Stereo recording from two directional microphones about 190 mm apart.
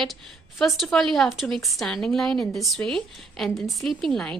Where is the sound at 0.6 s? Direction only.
Centre (ahead or behind).